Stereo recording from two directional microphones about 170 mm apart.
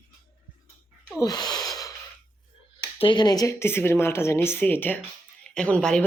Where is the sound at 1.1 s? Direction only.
20° left (ahead or behind).